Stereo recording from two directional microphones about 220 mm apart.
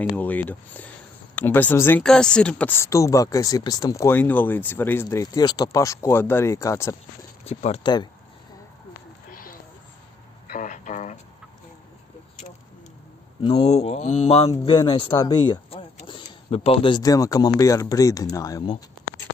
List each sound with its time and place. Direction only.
0.0 s speech: 5° left (ahead or behind)
7.6 s speech: 25° left (ahead or behind)
9.3 s a sound: 40° left (ahead or behind)
13.4 s speech: 30° left (ahead or behind)